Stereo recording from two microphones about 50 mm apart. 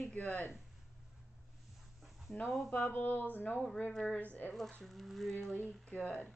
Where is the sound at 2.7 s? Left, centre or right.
Left.